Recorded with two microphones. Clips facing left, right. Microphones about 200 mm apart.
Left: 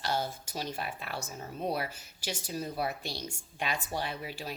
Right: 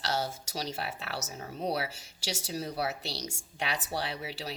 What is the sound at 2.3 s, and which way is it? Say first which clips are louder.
Speech: right 1 dB; 80° right.